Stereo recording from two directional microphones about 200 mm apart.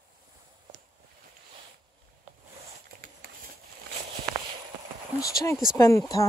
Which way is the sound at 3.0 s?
45° right (ahead or behind).